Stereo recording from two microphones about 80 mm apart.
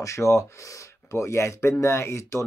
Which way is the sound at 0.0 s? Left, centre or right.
Left.